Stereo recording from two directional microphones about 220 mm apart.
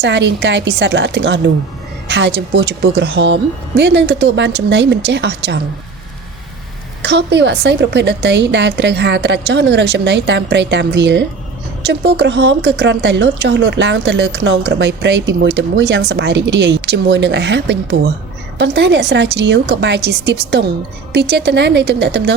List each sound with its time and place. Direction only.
0.0 s speech: 55° right (ahead or behind)
7.0 s speech: 50° right (ahead or behind)